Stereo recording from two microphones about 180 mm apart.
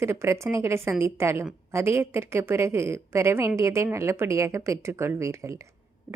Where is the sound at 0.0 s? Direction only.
15° right (ahead or behind).